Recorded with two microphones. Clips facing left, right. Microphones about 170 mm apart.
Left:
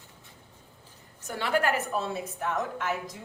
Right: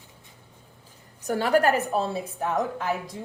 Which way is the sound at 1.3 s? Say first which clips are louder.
Right 6 dB; 40° right (ahead or behind).